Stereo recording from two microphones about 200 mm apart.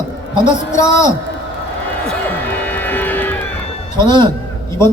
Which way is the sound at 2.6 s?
10° left (ahead or behind).